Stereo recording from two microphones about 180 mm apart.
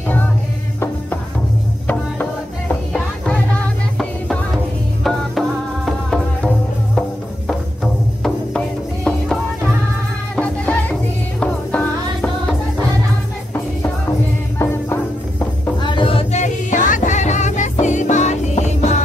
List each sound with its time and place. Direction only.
2.7 s music: 5° left (ahead or behind)
5.9 s music: 5° left (ahead or behind)
14.6 s music: 15° left (ahead or behind)
15.8 s music: 25° left (ahead or behind)